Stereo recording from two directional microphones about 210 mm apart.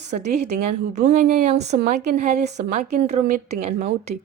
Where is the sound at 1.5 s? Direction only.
30° right (ahead or behind).